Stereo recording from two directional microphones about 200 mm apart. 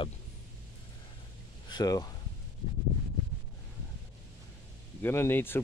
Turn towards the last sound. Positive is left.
turn(degrees=10)  # may be behind; listen again after turning